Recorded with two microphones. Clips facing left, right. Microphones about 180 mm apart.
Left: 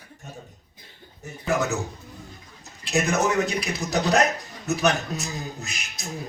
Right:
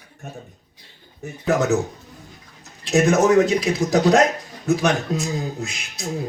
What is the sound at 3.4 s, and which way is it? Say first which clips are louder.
Speech: right 8 dB; 90° right.